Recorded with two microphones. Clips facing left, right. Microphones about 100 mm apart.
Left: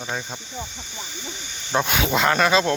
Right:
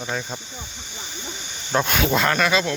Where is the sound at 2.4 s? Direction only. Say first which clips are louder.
Left 2 dB; 30° left (ahead or behind).